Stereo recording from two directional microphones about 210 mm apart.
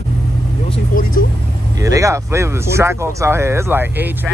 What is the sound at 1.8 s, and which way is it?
Speech, 15° right (ahead or behind).